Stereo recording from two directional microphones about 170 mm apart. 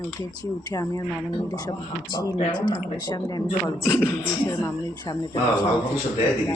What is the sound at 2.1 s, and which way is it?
Speech, 25° left (ahead or behind).